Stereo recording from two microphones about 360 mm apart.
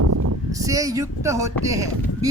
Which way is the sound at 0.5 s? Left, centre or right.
Centre.